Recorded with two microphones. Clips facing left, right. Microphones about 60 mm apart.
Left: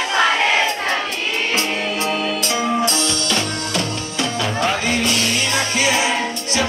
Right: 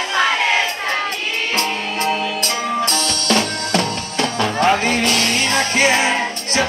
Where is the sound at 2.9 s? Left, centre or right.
Left.